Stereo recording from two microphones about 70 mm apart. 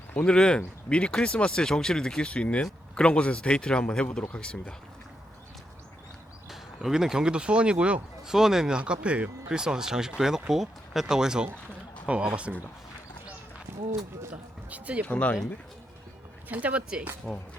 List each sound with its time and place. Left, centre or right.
0.3 s speech: centre
6.5 s speech: centre
14.7 s speech: right
15.0 s speech: centre
16.5 s speech: right